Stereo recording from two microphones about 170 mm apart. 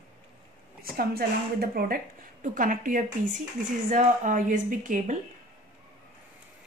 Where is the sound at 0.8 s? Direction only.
65° right (ahead or behind).